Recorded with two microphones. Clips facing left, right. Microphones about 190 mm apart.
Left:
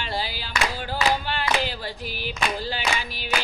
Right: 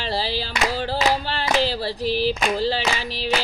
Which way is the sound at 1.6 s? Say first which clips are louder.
Right 6 dB; 35° right (ahead or behind).